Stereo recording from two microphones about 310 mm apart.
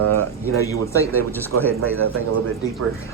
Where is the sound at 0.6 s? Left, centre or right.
Centre.